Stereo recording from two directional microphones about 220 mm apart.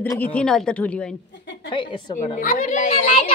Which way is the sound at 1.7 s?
20° left (ahead or behind).